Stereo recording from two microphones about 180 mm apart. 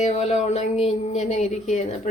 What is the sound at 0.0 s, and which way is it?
A woman's voice, 35° left (ahead or behind).